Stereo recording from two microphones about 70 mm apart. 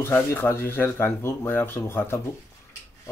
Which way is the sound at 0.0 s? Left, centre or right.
Left.